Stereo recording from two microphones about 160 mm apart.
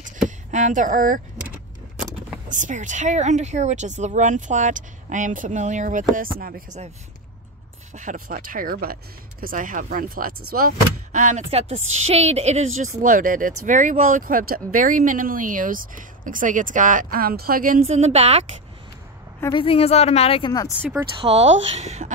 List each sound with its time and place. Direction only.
0.0 s a sound: 50° right (ahead or behind)
2.5 s speech: 50° right (ahead or behind)
7.9 s speech: 50° right (ahead or behind)
17.8 s speech: 45° right (ahead or behind)
19.5 s speech: 35° left (ahead or behind)
21.2 s speech: 40° right (ahead or behind)